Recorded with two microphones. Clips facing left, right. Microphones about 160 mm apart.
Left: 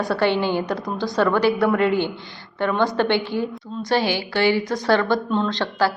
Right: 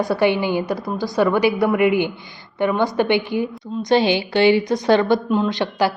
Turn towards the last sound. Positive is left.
turn(degrees=-20)  # may be behind; listen again after turning